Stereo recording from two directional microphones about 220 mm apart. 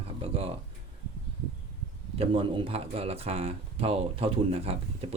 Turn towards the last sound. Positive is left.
turn(degrees=-25)  # may be behind; listen again after turning